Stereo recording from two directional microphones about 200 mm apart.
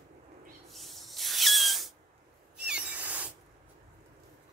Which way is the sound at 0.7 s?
Centre (ahead or behind).